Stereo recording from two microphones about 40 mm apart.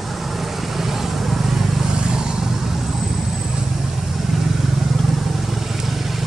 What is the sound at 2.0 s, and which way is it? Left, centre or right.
Vehicle, centre.